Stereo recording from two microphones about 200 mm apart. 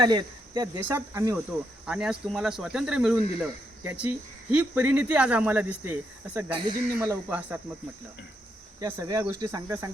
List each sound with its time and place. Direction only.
0.0 s speech: 20° right (ahead or behind)
0.8 s speech: 10° right (ahead or behind)
1.9 s speech: 5° right (ahead or behind)
6.5 s speech: 25° right (ahead or behind)
7.3 s speech: 5° right (ahead or behind)
8.8 s speech: 15° right (ahead or behind)